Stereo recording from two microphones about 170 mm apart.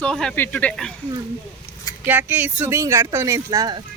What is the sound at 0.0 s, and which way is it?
Speech, 5° left (ahead or behind).